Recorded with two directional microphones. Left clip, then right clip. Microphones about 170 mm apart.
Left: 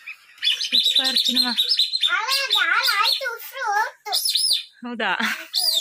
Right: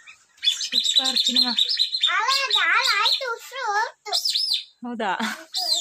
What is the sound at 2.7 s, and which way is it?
Speech, 40° right (ahead or behind).